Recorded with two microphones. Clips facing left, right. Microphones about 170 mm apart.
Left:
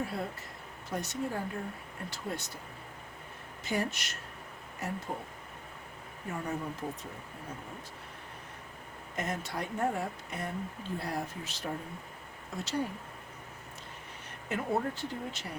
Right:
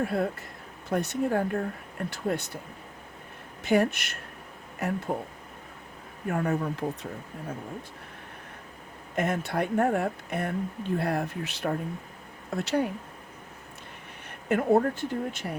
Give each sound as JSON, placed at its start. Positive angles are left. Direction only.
{"t": 0.0, "sound": "speech", "side_deg": -60}
{"t": 3.6, "sound": "speech", "side_deg": -60}
{"t": 6.2, "sound": "speech", "side_deg": -65}
{"t": 9.1, "sound": "speech", "side_deg": -60}
{"t": 14.3, "sound": "speech", "side_deg": -55}